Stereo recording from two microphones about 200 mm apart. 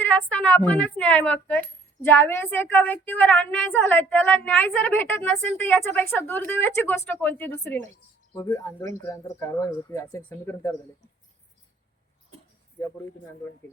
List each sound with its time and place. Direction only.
0.0 s a woman's voice: 10° left (ahead or behind)